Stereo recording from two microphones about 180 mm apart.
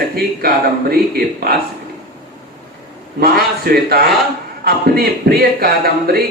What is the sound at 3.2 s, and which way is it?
A man's voice, 60° right (ahead or behind).